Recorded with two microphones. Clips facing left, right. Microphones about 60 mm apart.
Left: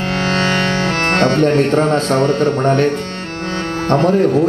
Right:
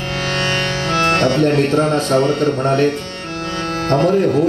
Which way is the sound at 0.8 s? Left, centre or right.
Left.